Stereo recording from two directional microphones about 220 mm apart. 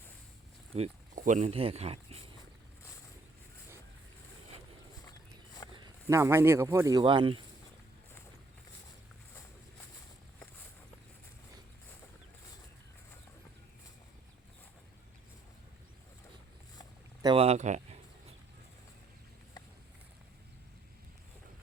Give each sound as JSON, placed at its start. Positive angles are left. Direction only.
{"t": 0.7, "sound": "speech", "side_deg": -30}
{"t": 5.7, "sound": "speech", "side_deg": -15}
{"t": 17.2, "sound": "a sound", "side_deg": -25}